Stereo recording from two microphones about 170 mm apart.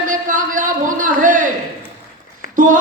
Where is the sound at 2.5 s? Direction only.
50° right (ahead or behind).